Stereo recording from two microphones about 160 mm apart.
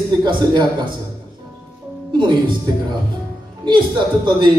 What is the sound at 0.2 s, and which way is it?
Speech, 30° right (ahead or behind).